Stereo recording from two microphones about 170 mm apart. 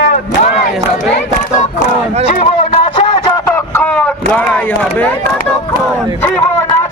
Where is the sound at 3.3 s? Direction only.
15° left (ahead or behind).